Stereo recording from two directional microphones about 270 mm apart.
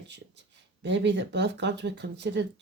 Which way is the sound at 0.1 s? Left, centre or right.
Right.